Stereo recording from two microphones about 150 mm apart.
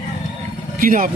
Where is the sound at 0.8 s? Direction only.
65° right (ahead or behind).